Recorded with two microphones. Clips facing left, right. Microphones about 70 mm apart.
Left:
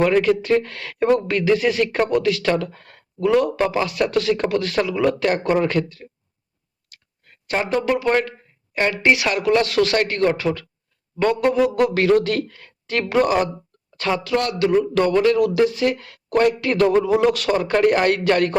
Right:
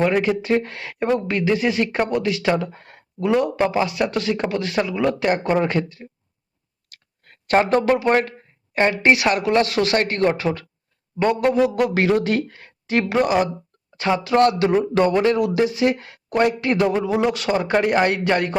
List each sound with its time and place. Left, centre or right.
0.0 s speech: centre
6.9 s clicking: right
7.9 s speech: right
11.4 s speech: right
14.3 s speech: right; by 18.5 s centre